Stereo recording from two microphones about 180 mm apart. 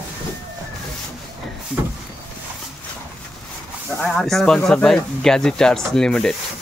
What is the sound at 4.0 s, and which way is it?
Speech, centre (ahead or behind).